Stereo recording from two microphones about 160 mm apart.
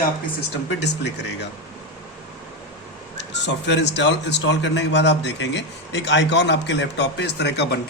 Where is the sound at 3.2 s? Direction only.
90° left.